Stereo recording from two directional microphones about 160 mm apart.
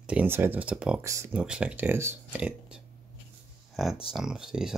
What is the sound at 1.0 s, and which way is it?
Speech, 20° right (ahead or behind).